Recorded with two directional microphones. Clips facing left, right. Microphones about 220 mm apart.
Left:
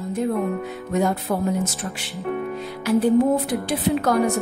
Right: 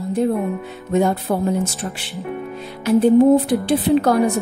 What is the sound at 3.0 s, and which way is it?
A woman's voice, 30° right (ahead or behind).